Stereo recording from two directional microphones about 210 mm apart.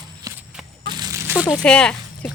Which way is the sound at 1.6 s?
5° left (ahead or behind).